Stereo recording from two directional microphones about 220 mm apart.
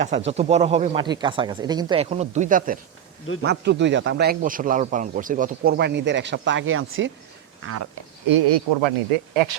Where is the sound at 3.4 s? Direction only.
50° right (ahead or behind).